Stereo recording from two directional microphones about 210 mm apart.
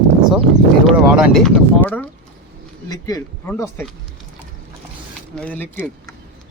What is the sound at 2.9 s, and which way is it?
Speech, 15° left (ahead or behind).